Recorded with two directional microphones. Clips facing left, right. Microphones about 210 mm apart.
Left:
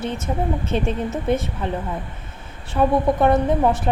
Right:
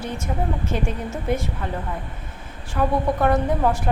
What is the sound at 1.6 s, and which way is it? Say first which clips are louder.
A woman's voice: left 3 dB; 20° left (ahead or behind).